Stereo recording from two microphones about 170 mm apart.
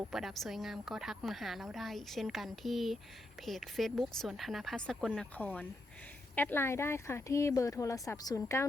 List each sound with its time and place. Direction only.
0.1 s a woman's voice: centre (ahead or behind); by 8.6 s 20° left (ahead or behind)